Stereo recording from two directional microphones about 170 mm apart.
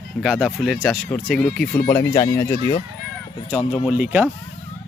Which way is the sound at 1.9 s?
20° left (ahead or behind).